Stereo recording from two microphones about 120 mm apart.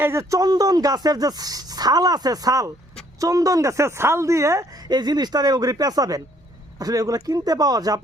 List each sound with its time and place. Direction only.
0.0 s speech: 20° right (ahead or behind)